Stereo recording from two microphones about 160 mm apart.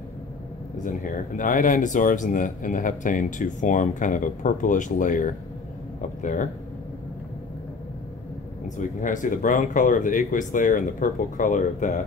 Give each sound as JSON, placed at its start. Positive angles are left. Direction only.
{"t": 0.8, "sound": "speech", "side_deg": 55}
{"t": 8.6, "sound": "speech", "side_deg": 50}